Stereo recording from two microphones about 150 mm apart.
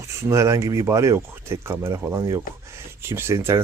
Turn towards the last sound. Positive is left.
turn(degrees=-20)  # may be behind; listen again after turning